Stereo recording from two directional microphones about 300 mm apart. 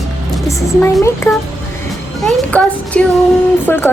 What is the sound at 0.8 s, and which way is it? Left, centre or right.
A child's voice, centre.